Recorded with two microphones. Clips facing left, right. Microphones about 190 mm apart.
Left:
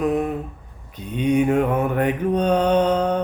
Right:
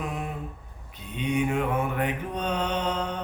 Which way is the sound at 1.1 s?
45° left (ahead or behind).